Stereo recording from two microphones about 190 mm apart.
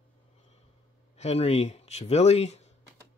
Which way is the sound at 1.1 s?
35° left (ahead or behind).